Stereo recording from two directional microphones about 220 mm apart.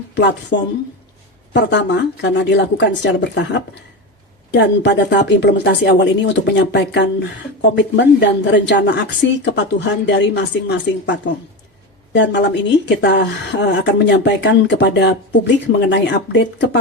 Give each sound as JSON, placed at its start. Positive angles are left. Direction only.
{"t": 0.1, "sound": "a woman's voice", "side_deg": 55}